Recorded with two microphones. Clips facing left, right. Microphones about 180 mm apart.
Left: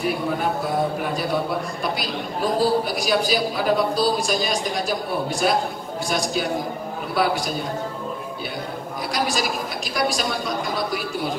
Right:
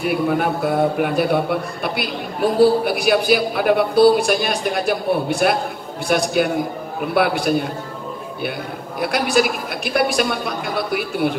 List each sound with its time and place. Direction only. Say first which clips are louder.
0.0 s a man's voice: right 4 dB; 60° right (ahead or behind)
9.0 s a man's voice: right 7 dB; 60° right (ahead or behind)